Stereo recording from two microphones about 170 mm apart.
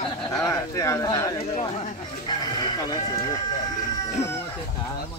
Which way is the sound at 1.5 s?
40° left (ahead or behind).